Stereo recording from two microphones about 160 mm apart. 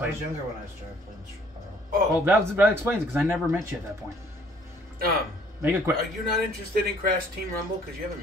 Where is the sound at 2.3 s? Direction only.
10° right (ahead or behind).